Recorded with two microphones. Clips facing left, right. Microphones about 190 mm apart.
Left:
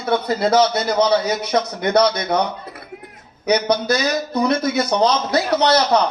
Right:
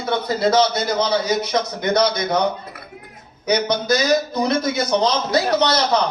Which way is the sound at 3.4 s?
60° left (ahead or behind).